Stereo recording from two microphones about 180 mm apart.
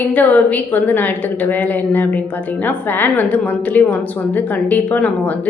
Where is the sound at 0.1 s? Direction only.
10° left (ahead or behind).